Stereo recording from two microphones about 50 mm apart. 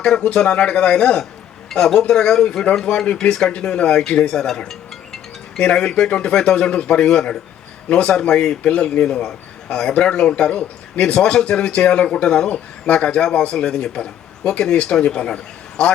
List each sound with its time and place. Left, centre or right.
0.0 s a man's voice: centre
4.7 s music: centre
6.1 s speech: left
6.3 s a man's voice: centre
14.6 s a man's voice: centre